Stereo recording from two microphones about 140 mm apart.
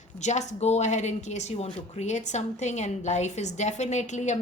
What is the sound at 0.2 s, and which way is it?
A woman's voice, 55° left (ahead or behind).